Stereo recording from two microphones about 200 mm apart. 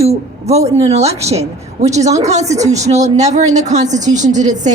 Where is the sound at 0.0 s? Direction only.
30° right (ahead or behind).